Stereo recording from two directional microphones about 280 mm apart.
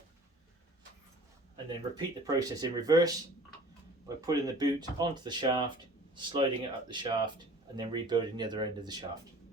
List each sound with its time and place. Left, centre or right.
1.5 s speech: centre
4.3 s speech: centre